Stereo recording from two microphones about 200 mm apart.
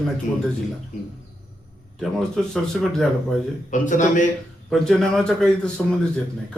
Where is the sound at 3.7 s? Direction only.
40° left (ahead or behind).